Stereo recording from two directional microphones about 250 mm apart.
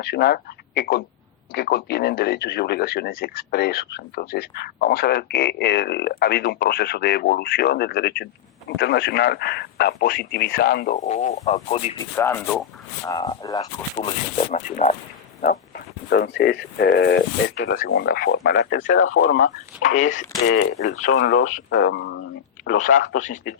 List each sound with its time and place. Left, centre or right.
0.0 s speech: left
12.1 s speech: centre; by 19.0 s left
19.0 s speech: left
19.3 s speech: left
22.6 s speech: left